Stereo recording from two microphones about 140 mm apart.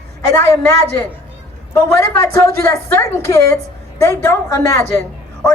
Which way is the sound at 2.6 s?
20° left (ahead or behind).